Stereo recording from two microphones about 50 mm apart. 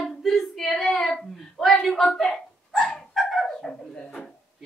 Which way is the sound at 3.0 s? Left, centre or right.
Centre.